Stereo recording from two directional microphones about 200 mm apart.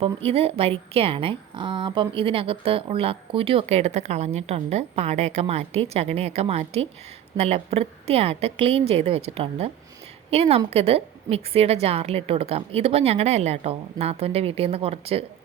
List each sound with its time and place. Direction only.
0.0 s a woman's voice: 30° right (ahead or behind)